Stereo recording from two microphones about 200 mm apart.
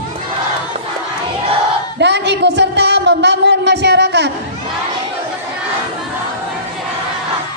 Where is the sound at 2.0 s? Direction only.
60° right (ahead or behind).